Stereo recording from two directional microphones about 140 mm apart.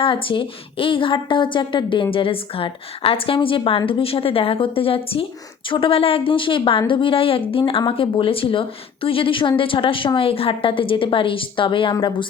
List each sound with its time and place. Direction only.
0.0 s a woman's voice: 40° left (ahead or behind)